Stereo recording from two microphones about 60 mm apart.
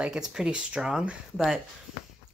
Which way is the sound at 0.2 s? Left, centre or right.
Centre.